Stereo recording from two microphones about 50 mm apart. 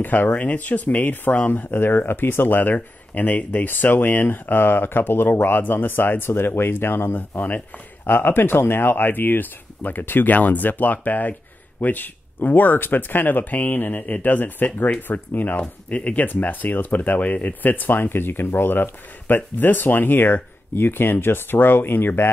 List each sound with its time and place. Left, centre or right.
0.0 s speech: left
7.2 s speech: left